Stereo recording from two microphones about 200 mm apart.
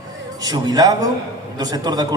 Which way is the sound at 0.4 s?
20° right (ahead or behind).